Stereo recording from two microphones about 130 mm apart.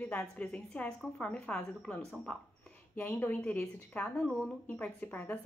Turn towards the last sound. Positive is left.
turn(degrees=15)  # may be behind; listen again after turning